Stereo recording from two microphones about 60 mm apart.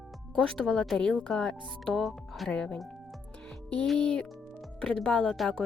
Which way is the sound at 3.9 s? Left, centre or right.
Centre.